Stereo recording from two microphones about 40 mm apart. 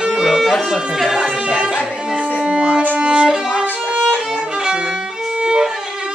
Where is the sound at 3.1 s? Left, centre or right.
Right.